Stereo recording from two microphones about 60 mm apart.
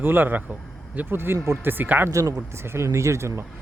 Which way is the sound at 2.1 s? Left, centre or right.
Right.